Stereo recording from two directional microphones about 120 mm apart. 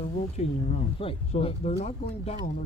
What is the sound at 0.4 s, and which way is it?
Speech, 70° left (ahead or behind).